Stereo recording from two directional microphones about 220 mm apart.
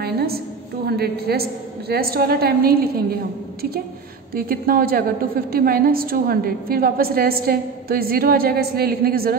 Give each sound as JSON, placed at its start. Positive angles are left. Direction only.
{"t": 0.0, "sound": "a sound", "side_deg": -45}
{"t": 0.8, "sound": "a woman's voice", "side_deg": -45}
{"t": 4.3, "sound": "a woman's voice", "side_deg": -40}